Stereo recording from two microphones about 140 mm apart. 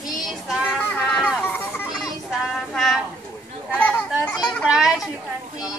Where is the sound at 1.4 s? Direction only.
15° left (ahead or behind).